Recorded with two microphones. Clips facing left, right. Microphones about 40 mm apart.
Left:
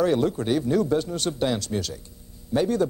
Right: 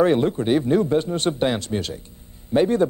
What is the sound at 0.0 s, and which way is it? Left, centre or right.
A man's voice, right.